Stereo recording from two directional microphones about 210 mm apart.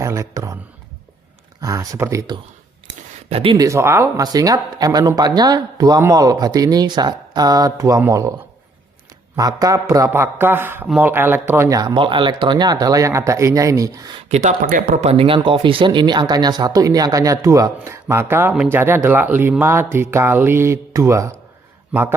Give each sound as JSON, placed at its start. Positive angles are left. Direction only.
{"t": 0.0, "sound": "a sound", "side_deg": -15}
{"t": 1.6, "sound": "speech", "side_deg": -15}
{"t": 3.2, "sound": "speech", "side_deg": -25}
{"t": 9.3, "sound": "speech", "side_deg": -15}
{"t": 14.3, "sound": "speech", "side_deg": -35}